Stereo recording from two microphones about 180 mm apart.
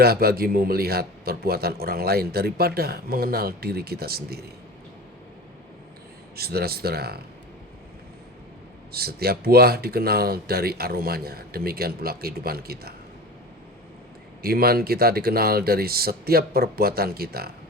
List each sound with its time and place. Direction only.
0.0 s a man's voice: 60° right (ahead or behind)
6.3 s a man's voice: 60° right (ahead or behind)
8.9 s a man's voice: 60° right (ahead or behind)
14.4 s a man's voice: 60° right (ahead or behind)